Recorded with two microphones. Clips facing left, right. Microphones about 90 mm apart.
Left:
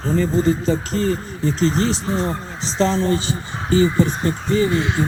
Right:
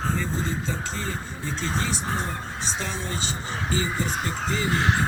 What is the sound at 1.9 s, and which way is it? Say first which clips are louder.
Speech: left 7 dB; 90° left.